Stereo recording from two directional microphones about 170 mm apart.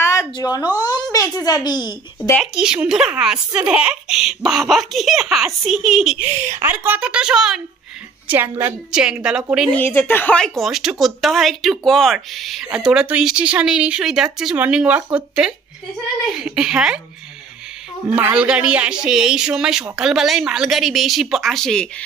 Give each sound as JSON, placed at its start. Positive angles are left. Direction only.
{"t": 0.0, "sound": "a sound", "side_deg": 20}
{"t": 1.1, "sound": "speech", "side_deg": 20}
{"t": 2.3, "sound": "a woman's voice", "side_deg": -5}
{"t": 9.7, "sound": "speech", "side_deg": 10}
{"t": 18.1, "sound": "speech", "side_deg": -10}